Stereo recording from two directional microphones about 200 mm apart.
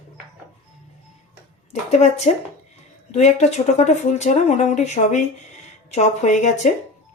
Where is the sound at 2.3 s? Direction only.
35° left (ahead or behind).